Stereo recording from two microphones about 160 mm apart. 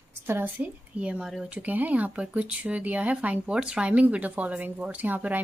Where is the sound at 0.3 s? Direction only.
10° right (ahead or behind).